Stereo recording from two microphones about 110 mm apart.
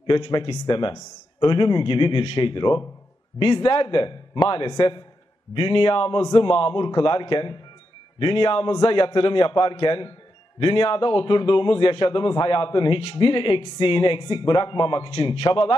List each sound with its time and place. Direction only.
0.1 s a man's voice: 45° left (ahead or behind)